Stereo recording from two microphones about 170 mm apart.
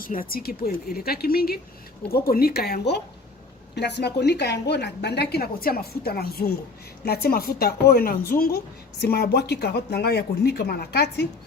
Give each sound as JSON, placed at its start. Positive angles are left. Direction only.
{"t": 0.0, "sound": "a woman's voice", "side_deg": 55}